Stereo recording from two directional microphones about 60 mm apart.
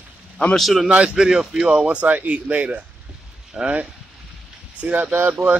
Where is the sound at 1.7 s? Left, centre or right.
Right.